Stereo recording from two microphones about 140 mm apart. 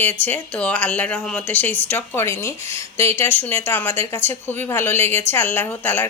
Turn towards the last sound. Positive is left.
turn(degrees=15)  # may be behind; listen again after turning